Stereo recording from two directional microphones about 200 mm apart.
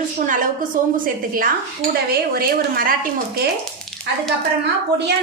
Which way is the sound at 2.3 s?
45° right (ahead or behind).